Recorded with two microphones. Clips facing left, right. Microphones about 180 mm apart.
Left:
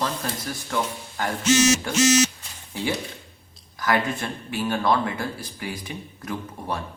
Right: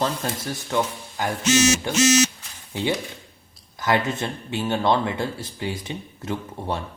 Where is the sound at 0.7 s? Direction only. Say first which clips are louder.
Right 3 dB; 15° right (ahead or behind).